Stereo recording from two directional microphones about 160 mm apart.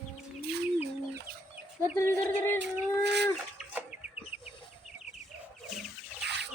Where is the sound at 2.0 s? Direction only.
15° left (ahead or behind).